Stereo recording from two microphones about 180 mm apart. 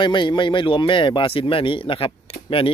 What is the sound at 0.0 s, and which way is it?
Speech, 25° left (ahead or behind).